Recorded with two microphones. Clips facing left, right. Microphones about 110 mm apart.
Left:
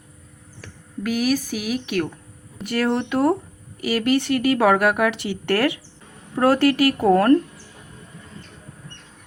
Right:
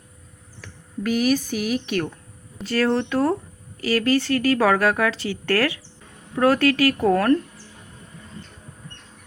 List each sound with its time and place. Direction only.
1.0 s speech: 5° left (ahead or behind)
2.6 s speech: 15° left (ahead or behind)